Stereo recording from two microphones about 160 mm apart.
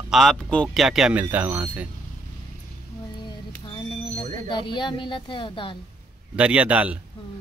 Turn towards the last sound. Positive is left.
turn(degrees=-10)  # may be behind; listen again after turning